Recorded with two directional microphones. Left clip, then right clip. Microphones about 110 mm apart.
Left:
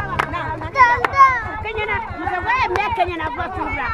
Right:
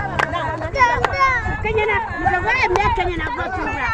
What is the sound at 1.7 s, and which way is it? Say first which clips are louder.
Speech: right 5 dB; 50° left (ahead or behind).